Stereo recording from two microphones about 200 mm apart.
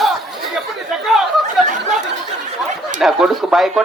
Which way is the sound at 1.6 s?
40° right (ahead or behind).